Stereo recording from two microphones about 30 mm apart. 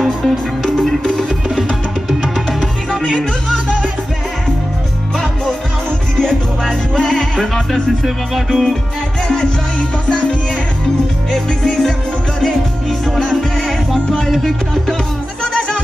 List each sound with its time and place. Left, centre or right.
0.7 s music: centre
1.5 s music: centre
6.1 s music: centre
9.3 s music: centre
11.3 s music: centre
13.0 s music: centre
13.9 s music: centre
14.4 s music: centre